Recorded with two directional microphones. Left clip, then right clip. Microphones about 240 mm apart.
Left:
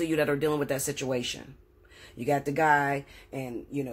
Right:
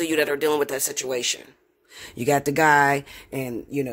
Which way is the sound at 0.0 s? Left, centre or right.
Right.